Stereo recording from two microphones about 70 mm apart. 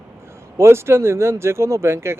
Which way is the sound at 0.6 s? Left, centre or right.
Right.